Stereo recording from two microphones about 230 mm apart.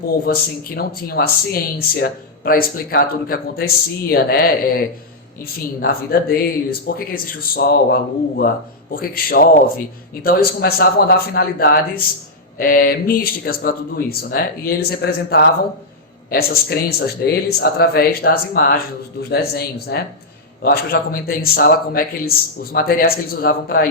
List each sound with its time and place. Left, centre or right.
0.3 s speech: left